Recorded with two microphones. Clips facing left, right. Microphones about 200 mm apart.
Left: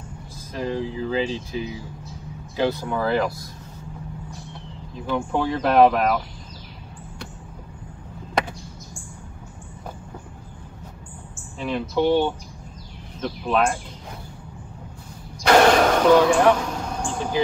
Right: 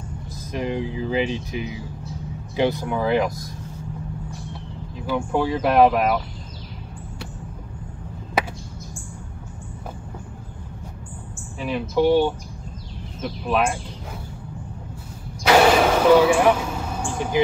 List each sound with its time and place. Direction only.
0.5 s speech: 15° right (ahead or behind)
5.0 s speech: 10° right (ahead or behind)
12.0 s speech: 10° right (ahead or behind)
15.4 s a sound: 5° right (ahead or behind)